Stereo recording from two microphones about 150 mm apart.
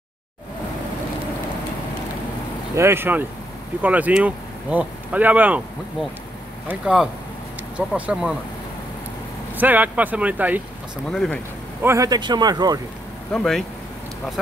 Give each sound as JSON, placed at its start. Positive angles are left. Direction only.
{"t": 2.7, "sound": "speech", "side_deg": -15}
{"t": 6.7, "sound": "speech", "side_deg": -5}
{"t": 9.6, "sound": "speech", "side_deg": -10}
{"t": 11.1, "sound": "speech", "side_deg": 5}
{"t": 11.8, "sound": "speech", "side_deg": -20}
{"t": 13.3, "sound": "speech", "side_deg": 5}